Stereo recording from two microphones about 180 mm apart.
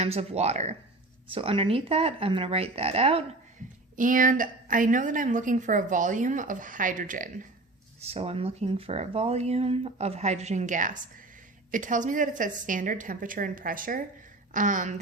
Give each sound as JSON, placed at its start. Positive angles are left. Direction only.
{"t": 0.0, "sound": "speech", "side_deg": -35}
{"t": 3.9, "sound": "a woman's voice", "side_deg": -50}
{"t": 8.0, "sound": "a woman's voice", "side_deg": -35}